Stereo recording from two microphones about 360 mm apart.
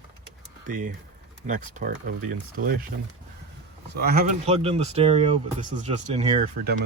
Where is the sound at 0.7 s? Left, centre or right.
Right.